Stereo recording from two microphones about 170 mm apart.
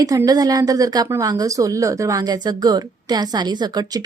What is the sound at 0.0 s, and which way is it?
Speech, 20° right (ahead or behind).